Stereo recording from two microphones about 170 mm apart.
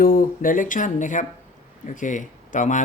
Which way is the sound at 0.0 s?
55° left (ahead or behind).